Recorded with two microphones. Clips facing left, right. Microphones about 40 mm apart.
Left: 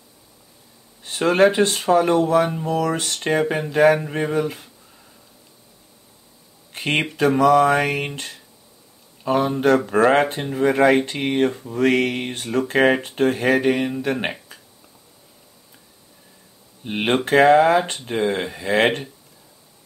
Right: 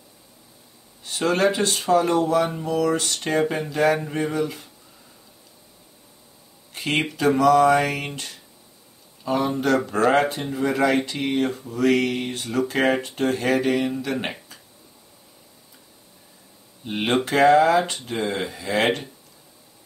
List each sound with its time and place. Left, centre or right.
1.0 s speech: left
6.7 s a sound: left
7.0 s speech: left
9.2 s speech: left
16.8 s speech: left